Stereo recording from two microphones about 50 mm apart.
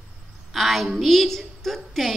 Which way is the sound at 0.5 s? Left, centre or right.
Centre.